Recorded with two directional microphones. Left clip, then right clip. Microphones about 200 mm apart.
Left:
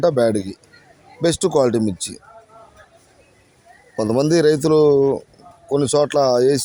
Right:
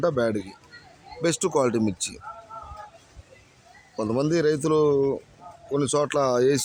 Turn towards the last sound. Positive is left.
turn(degrees=10)  # may be behind; listen again after turning